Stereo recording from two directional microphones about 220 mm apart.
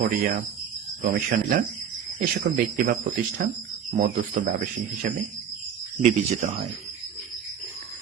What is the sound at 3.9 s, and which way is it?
Speech, 35° right (ahead or behind).